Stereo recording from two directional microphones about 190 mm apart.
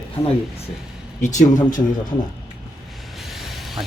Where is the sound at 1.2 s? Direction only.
40° left (ahead or behind).